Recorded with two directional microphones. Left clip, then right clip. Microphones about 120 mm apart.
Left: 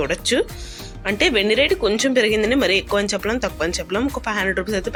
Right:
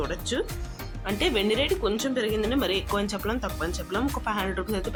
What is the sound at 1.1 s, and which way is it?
Speech, 25° left (ahead or behind).